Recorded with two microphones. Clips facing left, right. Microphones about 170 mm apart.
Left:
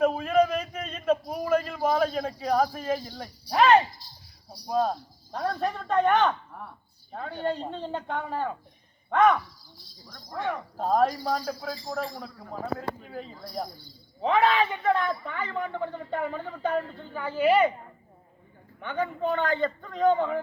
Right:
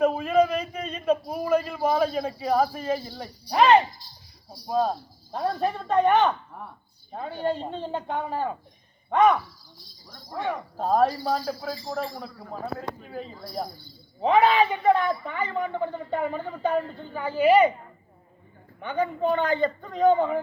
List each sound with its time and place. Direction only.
0.0 s a man's voice: 5° right (ahead or behind)
5.3 s a woman's voice: 25° right (ahead or behind)
5.5 s a woman's voice: 10° right (ahead or behind)
18.8 s speech: 5° right (ahead or behind)
19.6 s a woman's voice: 15° right (ahead or behind)